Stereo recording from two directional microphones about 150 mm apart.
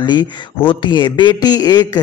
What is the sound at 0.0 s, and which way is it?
Speech, 30° left (ahead or behind).